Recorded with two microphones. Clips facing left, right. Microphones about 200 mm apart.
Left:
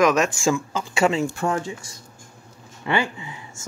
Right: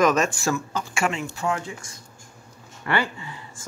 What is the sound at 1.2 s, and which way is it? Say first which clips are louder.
Speech: left 4 dB; 45° left (ahead or behind).